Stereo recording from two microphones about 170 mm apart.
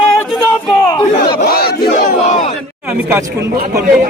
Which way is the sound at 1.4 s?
65° left (ahead or behind).